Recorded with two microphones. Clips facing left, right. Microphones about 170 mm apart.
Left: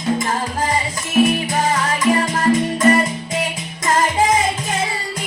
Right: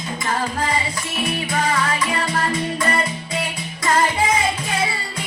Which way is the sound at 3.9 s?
45° left (ahead or behind).